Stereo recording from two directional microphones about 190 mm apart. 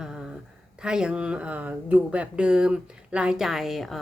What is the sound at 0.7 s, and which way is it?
Speech, 5° right (ahead or behind).